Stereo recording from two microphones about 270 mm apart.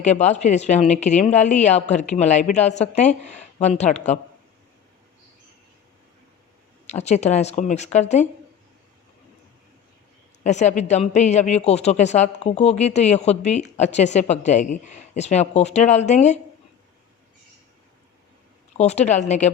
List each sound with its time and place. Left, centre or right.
0.0 s speech: left
6.8 s speech: left
10.4 s speech: left
18.8 s speech: left